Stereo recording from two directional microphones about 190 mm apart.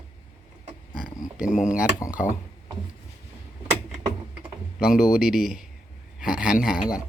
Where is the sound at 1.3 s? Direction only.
5° right (ahead or behind).